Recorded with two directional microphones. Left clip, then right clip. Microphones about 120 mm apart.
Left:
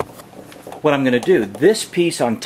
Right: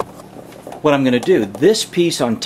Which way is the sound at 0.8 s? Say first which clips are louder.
Right 1 dB; 10° left (ahead or behind).